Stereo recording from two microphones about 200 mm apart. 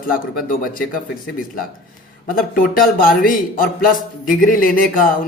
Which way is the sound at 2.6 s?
45° left (ahead or behind).